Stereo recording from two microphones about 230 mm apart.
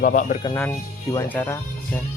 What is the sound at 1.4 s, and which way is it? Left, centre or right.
Speech, centre.